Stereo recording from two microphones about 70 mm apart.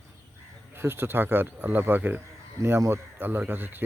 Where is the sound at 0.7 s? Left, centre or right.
Right.